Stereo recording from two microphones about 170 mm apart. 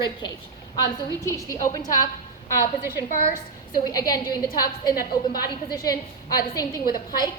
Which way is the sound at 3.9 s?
20° left (ahead or behind).